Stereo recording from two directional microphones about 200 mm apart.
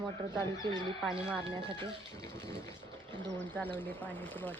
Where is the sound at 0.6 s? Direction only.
20° right (ahead or behind).